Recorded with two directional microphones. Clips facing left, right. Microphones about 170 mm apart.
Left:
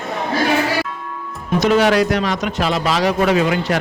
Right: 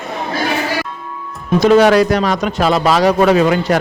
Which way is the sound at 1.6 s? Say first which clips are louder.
Right 5 dB; 35° right (ahead or behind).